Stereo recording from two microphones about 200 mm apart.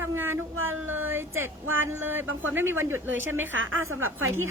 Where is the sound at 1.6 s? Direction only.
90° right.